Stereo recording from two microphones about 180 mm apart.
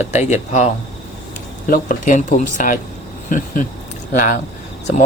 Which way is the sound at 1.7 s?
45° left (ahead or behind).